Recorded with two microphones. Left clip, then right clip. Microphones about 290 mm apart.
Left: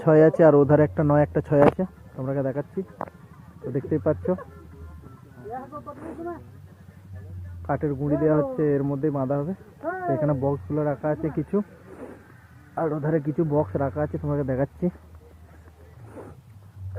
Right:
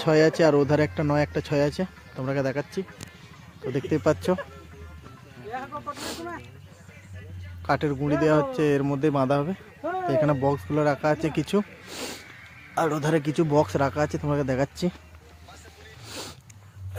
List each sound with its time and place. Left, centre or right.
0.0 s speech: centre
3.8 s speech: centre
7.7 s speech: right